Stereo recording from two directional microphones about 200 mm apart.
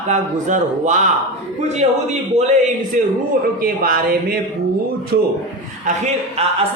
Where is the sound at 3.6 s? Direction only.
45° right (ahead or behind).